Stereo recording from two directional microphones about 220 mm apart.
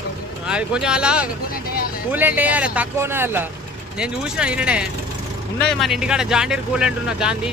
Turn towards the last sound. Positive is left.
turn(degrees=-5)  # may be behind; listen again after turning